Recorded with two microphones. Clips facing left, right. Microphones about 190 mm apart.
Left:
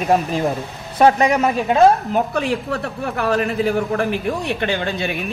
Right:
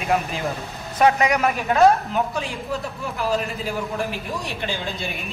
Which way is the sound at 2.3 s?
65° left (ahead or behind).